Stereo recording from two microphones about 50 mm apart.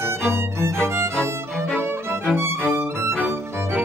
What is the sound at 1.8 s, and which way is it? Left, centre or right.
Violin, right.